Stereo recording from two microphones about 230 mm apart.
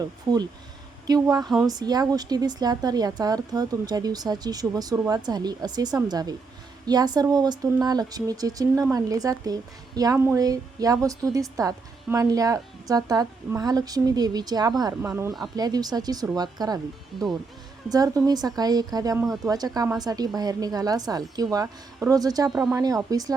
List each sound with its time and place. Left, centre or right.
1.0 s speech: centre
17.8 s speech: centre